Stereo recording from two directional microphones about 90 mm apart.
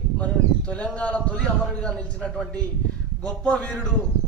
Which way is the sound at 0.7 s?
15° left (ahead or behind).